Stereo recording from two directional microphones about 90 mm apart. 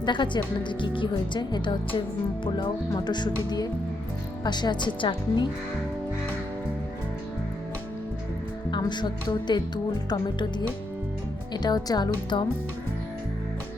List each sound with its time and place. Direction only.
0.0 s music: 60° left (ahead or behind)
2.0 s speech: 75° left (ahead or behind)
2.9 s speech: 55° left (ahead or behind)
4.4 s music: 55° left (ahead or behind)
8.9 s music: 55° left (ahead or behind)
11.5 s speech: 50° left (ahead or behind)